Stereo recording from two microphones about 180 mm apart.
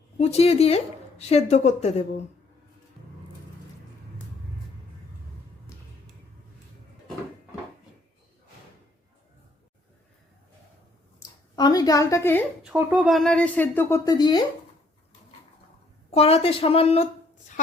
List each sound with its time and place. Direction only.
0.2 s speech: 35° left (ahead or behind)
11.2 s a sound: 20° left (ahead or behind)
12.6 s speech: 5° right (ahead or behind); by 14.4 s 25° left (ahead or behind)
16.1 s speech: 35° left (ahead or behind)